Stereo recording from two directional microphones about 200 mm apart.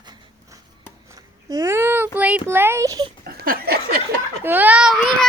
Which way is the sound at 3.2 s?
50° right (ahead or behind).